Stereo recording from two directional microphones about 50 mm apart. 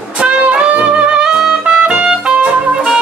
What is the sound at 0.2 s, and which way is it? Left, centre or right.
Music, right.